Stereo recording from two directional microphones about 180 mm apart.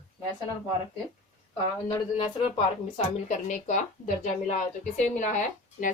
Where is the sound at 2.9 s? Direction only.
40° left (ahead or behind).